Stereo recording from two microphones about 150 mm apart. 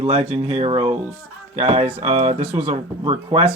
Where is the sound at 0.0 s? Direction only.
40° right (ahead or behind).